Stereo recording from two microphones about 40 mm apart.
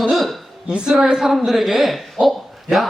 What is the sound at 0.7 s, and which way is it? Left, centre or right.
A woman's voice, right.